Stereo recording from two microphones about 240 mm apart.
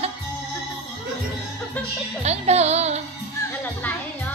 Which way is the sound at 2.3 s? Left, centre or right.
Right.